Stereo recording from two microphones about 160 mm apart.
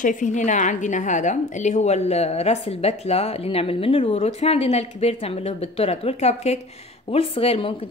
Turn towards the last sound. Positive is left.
turn(degrees=35)  # may be behind; listen again after turning